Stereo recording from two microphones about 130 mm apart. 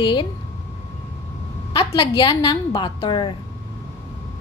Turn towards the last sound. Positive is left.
turn(degrees=40)  # may be behind; listen again after turning